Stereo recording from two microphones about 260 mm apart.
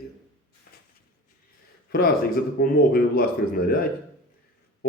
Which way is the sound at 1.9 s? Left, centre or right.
Left.